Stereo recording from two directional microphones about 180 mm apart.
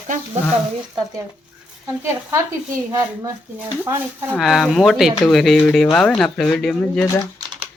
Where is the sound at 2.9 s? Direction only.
20° right (ahead or behind).